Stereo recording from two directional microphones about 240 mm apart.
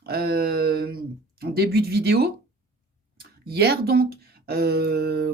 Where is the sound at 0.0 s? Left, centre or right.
Right.